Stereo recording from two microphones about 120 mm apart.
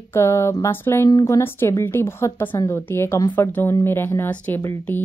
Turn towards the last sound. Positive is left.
turn(degrees=15)  # may be behind; listen again after turning